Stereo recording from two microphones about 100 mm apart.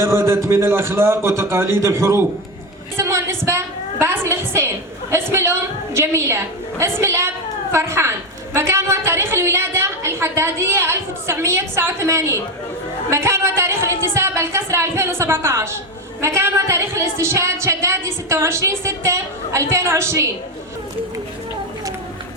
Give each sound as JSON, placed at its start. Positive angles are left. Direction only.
{"t": 0.0, "sound": "a woman's voice", "side_deg": -25}
{"t": 3.0, "sound": "a sound", "side_deg": -30}
{"t": 4.0, "sound": "a woman's voice", "side_deg": -25}